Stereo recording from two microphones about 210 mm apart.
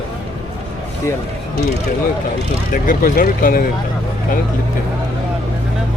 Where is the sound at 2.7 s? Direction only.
40° left (ahead or behind).